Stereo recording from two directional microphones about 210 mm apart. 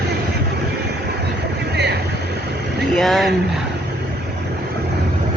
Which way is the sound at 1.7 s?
50° right (ahead or behind).